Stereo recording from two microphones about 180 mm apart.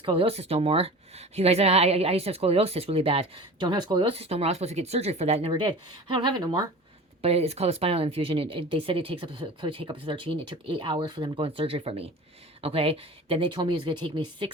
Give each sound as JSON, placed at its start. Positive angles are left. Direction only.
{"t": 0.0, "sound": "speech", "side_deg": -30}
{"t": 7.2, "sound": "speech", "side_deg": -35}